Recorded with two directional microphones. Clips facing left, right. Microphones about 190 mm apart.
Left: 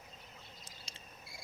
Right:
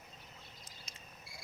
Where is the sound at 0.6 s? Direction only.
30° left (ahead or behind).